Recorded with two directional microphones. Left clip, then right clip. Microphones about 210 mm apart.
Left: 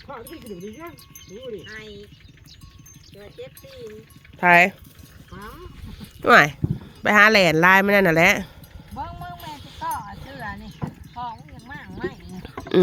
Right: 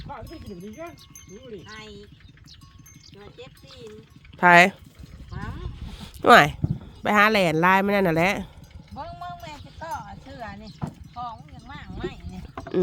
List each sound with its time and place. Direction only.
1.6 s speech: 55° right (ahead or behind)
4.4 s speech: 25° right (ahead or behind)
6.2 s speech: 15° right (ahead or behind)
9.0 s music: 15° right (ahead or behind)
10.8 s horse: centre (ahead or behind)